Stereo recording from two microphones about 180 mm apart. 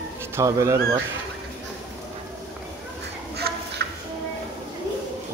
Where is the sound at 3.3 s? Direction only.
65° right (ahead or behind).